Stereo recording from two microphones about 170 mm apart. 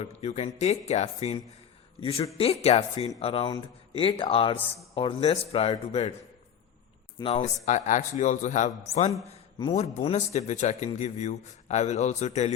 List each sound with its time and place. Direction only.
0.0 s speech: 40° left (ahead or behind)
7.2 s speech: 30° left (ahead or behind)
7.4 s speech: 45° left (ahead or behind)
9.2 s a sound: 40° left (ahead or behind)
9.7 s speech: 40° left (ahead or behind)